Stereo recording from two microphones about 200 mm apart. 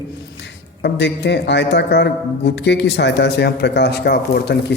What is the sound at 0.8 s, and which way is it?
Speech, 55° left (ahead or behind).